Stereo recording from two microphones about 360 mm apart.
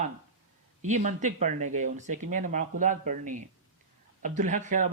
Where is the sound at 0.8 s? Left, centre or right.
Centre.